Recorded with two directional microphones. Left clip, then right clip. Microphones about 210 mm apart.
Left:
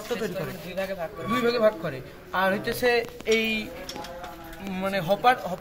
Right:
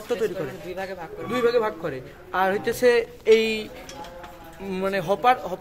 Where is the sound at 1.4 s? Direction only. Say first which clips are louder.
Right 1 dB; 55° right (ahead or behind).